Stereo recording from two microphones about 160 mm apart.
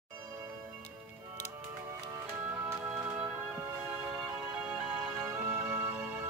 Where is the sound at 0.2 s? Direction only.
15° right (ahead or behind).